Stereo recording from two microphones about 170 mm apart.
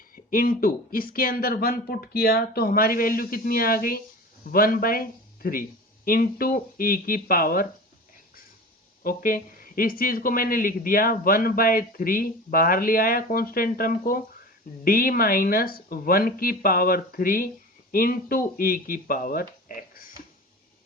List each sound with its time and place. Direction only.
0.3 s speech: 55° left (ahead or behind)
9.0 s speech: 55° left (ahead or behind)